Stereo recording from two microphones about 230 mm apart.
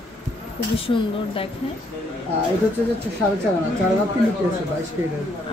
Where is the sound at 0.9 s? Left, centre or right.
Left.